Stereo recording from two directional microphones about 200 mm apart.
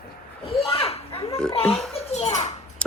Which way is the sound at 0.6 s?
25° left (ahead or behind).